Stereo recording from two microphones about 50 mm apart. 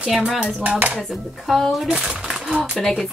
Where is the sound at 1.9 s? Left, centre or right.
Centre.